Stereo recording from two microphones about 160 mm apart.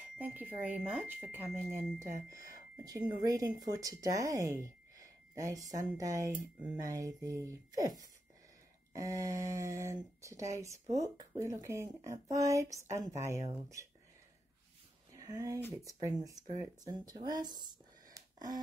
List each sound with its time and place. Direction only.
0.2 s speech: 10° right (ahead or behind)
6.3 s speech: 10° right (ahead or behind)
6.8 s speech: 20° right (ahead or behind)
8.9 s speech: 20° right (ahead or behind)
15.1 s speech: 20° right (ahead or behind)
18.2 s a sound: 25° right (ahead or behind)